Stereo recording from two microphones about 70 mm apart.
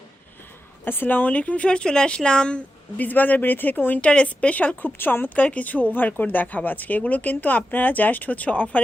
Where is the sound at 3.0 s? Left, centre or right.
Left.